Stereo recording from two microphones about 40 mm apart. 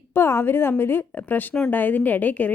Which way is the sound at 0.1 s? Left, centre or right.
Left.